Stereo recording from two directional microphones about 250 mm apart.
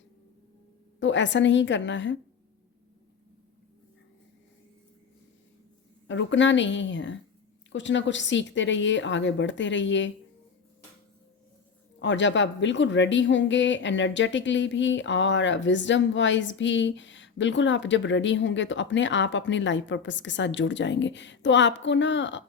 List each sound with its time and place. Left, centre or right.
0.9 s speech: left
6.1 s speech: left
11.9 s speech: left